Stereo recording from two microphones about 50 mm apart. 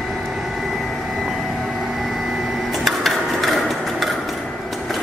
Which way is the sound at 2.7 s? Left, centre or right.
Centre.